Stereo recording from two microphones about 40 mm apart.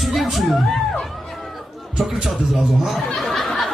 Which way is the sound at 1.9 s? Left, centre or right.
Centre.